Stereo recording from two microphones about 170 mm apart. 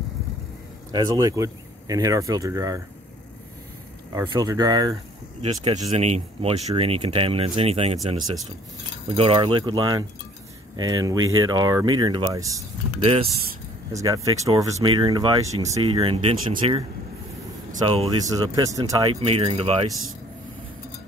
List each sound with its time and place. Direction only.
0.9 s speech: 20° right (ahead or behind)
4.1 s speech: 25° right (ahead or behind)
5.8 s speech: 40° right (ahead or behind); by 12.6 s 20° right (ahead or behind)
13.0 s speech: 35° right (ahead or behind)
13.9 s speech: 20° right (ahead or behind)
17.8 s speech: 35° right (ahead or behind)
18.3 s speech: 20° right (ahead or behind)
19.2 s speech: 35° right (ahead or behind)